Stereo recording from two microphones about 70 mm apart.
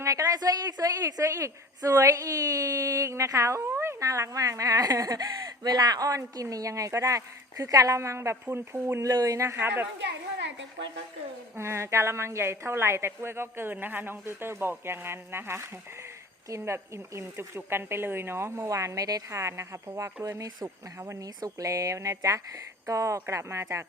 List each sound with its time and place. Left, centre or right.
0.0 s a woman's voice: right
9.2 s speech: right
11.5 s speech: right